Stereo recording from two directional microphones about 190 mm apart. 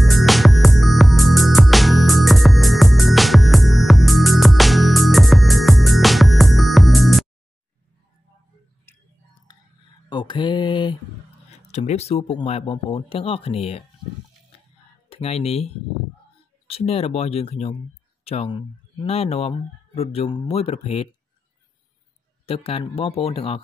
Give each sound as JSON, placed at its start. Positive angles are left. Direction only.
{"t": 0.0, "sound": "music", "side_deg": 0}
{"t": 10.0, "sound": "mantra", "side_deg": 25}
{"t": 11.6, "sound": "speech", "side_deg": 35}
{"t": 15.0, "sound": "speech", "side_deg": 30}
{"t": 22.5, "sound": "speech", "side_deg": 30}